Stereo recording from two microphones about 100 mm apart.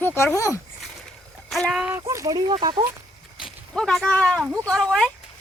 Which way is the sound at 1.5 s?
Centre (ahead or behind).